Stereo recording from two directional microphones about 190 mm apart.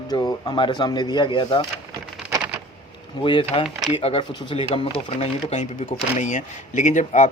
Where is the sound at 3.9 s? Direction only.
25° left (ahead or behind).